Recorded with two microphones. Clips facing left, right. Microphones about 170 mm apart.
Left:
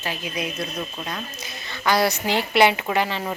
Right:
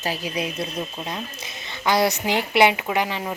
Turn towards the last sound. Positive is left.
turn(degrees=-15)  # may be behind; listen again after turning